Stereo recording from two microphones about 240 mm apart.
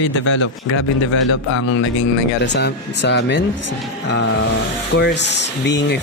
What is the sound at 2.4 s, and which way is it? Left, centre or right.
Speech, left.